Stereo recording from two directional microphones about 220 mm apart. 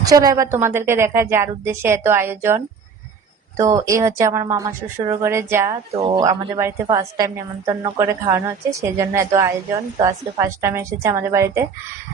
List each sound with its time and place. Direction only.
0.0 s a woman's voice: 15° right (ahead or behind)
3.6 s a woman's voice: 15° right (ahead or behind)
5.9 s speech: 25° right (ahead or behind)
6.6 s a woman's voice: 15° right (ahead or behind)